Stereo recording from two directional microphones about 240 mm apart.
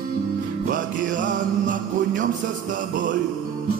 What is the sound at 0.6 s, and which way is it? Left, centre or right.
Music, right.